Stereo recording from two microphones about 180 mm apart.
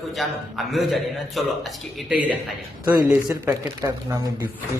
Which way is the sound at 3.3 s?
20° right (ahead or behind).